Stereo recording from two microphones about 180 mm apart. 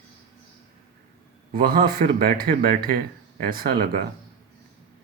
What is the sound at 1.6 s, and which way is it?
Speech, 55° right (ahead or behind).